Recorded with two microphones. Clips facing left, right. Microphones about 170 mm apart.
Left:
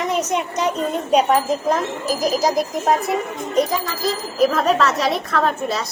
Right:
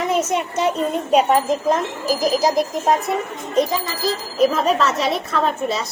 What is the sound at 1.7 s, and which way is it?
Speech, centre (ahead or behind).